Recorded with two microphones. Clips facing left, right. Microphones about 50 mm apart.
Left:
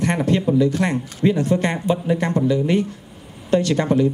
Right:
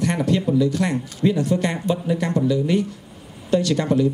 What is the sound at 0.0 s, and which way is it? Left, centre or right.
A man's voice, left.